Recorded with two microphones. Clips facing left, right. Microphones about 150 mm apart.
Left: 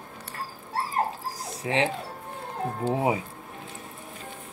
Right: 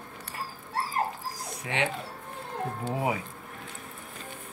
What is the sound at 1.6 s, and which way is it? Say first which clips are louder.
Speech: left 5 dB; 30° left (ahead or behind).